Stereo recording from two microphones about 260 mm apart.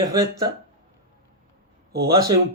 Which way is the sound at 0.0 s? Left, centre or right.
Centre.